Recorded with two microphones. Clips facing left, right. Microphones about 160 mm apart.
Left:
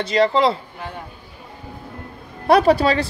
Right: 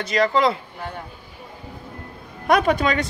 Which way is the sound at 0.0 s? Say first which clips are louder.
Left 2 dB; 30° left (ahead or behind).